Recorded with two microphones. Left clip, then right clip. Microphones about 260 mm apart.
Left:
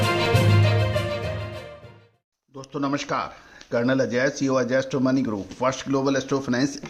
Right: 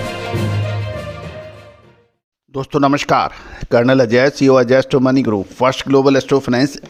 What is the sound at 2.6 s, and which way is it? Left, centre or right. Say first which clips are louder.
Speech: right 13 dB; right.